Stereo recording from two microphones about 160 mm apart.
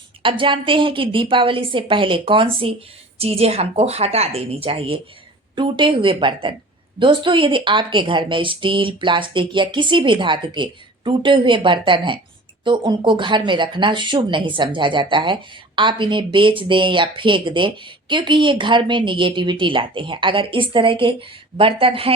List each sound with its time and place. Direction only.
0.2 s speech: 30° right (ahead or behind)